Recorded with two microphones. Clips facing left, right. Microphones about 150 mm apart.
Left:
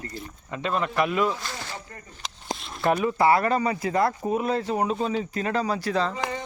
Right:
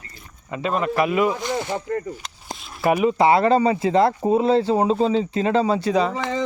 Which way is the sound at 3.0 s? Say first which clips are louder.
Right 5 dB; 20° right (ahead or behind).